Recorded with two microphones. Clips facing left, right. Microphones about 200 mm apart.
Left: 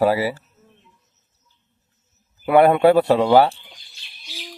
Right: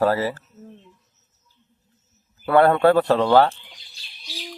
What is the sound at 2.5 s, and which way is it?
Speech, 15° left (ahead or behind).